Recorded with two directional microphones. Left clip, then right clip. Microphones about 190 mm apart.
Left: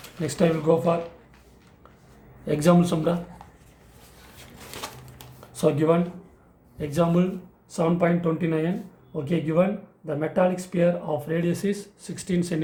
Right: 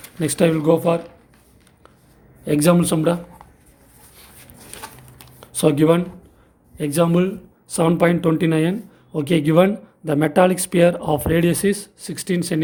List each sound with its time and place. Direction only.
0.2 s speech: 45° right (ahead or behind)
2.4 s speech: 40° right (ahead or behind)
5.4 s a sound: 50° right (ahead or behind)
6.7 s speech: 45° right (ahead or behind)